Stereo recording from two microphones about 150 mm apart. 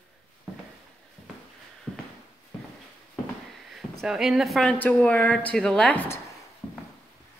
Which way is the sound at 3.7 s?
Centre (ahead or behind).